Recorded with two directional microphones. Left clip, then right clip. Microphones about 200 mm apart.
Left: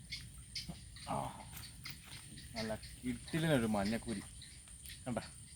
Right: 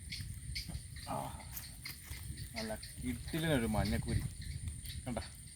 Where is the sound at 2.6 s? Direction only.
Centre (ahead or behind).